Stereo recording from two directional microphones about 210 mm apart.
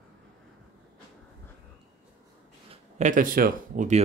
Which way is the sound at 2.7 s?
35° right (ahead or behind).